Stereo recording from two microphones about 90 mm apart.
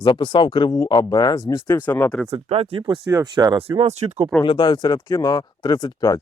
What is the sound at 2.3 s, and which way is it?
Speech, 90° right.